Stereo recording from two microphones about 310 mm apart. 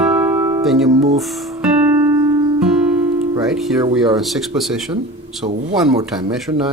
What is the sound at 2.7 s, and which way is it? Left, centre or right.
Music, centre.